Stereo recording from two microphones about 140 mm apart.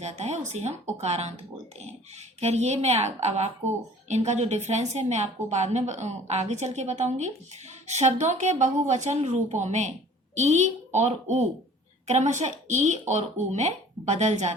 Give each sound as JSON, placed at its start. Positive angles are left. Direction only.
{"t": 0.0, "sound": "speech", "side_deg": -55}
{"t": 2.4, "sound": "a woman's voice", "side_deg": -50}